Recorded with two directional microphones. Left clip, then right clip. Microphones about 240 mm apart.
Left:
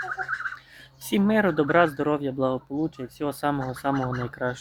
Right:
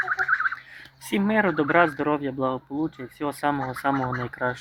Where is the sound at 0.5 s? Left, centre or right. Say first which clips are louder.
Right 5 dB; centre.